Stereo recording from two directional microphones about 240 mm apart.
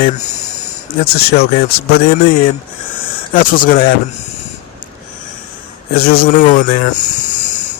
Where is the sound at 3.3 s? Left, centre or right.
Left.